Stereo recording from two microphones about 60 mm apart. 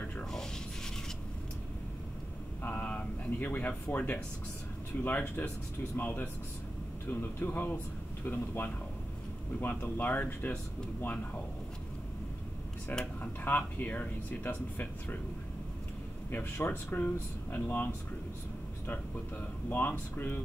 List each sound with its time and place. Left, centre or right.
0.2 s a sound: centre
2.6 s air conditioning: left
5.0 s speech: left
13.0 s speech: left
16.6 s speech: left
18.9 s speech: left